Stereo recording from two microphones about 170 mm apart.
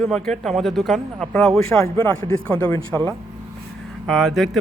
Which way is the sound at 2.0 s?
20° left (ahead or behind).